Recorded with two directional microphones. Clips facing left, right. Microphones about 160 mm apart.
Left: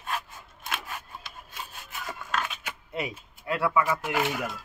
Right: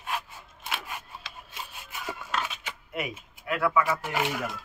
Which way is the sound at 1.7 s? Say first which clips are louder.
Right 2 dB; 5° right (ahead or behind).